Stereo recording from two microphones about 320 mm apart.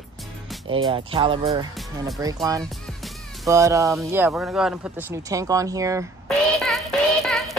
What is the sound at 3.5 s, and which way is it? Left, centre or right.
Speech, centre.